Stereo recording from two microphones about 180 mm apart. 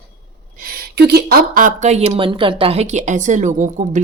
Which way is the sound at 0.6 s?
55° right (ahead or behind).